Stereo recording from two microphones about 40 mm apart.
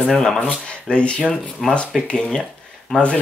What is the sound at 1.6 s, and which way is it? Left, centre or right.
Speech, centre.